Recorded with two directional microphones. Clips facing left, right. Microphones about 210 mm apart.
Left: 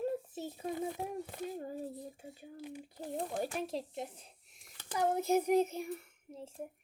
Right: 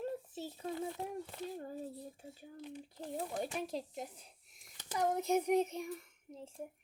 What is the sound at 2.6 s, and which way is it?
Speech, 10° left (ahead or behind).